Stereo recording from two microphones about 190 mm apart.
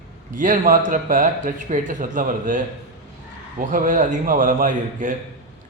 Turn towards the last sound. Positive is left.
turn(degrees=-45)  # may be behind; listen again after turning